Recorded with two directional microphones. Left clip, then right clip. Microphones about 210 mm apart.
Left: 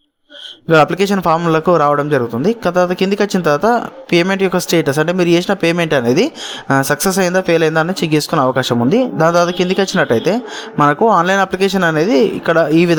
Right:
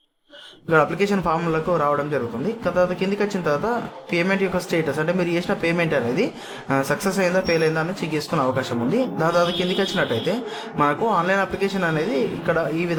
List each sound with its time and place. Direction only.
0.7 s speech: 40° left (ahead or behind)